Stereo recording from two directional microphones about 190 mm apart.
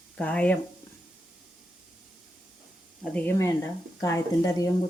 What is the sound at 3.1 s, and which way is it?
Speech, 10° left (ahead or behind).